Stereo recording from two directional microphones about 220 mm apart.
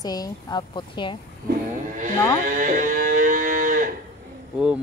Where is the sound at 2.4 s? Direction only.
35° right (ahead or behind).